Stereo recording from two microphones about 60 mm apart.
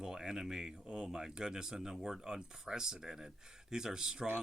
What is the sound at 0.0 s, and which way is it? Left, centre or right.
Speech, centre.